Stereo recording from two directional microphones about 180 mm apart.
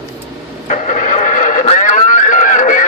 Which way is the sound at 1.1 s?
45° left (ahead or behind).